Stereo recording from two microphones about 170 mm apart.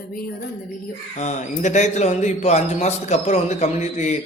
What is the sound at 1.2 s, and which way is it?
Speech, 45° left (ahead or behind).